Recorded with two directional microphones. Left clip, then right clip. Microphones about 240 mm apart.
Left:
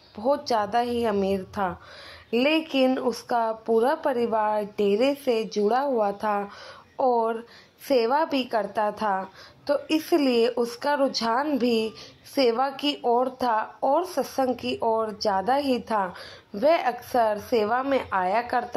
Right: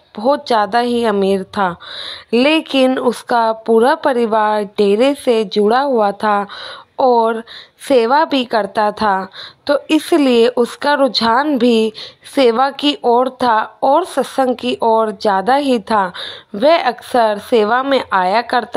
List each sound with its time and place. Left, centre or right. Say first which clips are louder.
0.2 s a woman's voice: right 10 dB; right